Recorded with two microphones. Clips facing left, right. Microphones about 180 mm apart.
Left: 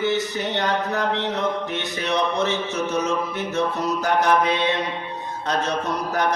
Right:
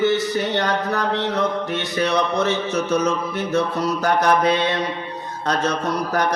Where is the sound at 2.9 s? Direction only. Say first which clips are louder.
Right 3 dB; 40° right (ahead or behind).